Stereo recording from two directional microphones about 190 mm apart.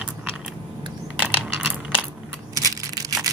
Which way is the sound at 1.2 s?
5° right (ahead or behind).